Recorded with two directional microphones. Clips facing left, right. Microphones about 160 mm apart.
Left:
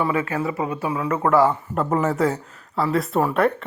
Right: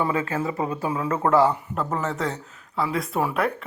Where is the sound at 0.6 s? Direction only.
30° right (ahead or behind).